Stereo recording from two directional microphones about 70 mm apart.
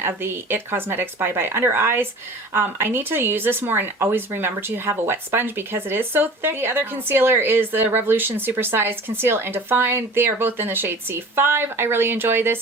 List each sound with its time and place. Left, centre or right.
0.0 s speech: right